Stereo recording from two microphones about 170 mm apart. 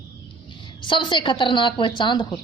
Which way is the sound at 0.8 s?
30° left (ahead or behind).